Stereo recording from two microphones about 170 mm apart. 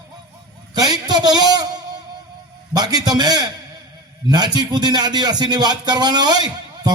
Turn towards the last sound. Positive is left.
turn(degrees=-25)  # may be behind; listen again after turning